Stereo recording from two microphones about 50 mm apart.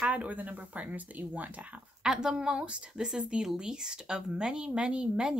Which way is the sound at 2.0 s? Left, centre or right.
Centre.